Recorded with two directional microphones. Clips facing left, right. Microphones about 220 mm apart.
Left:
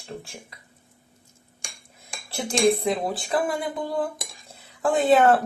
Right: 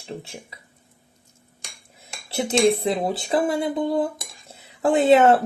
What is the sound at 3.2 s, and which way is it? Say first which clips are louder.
Dishes: right 5 dB; 25° right (ahead or behind).